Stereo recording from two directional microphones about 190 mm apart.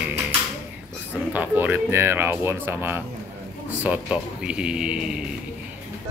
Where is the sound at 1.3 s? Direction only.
10° right (ahead or behind).